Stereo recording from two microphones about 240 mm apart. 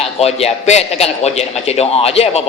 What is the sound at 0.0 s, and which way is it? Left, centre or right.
A man's voice, left.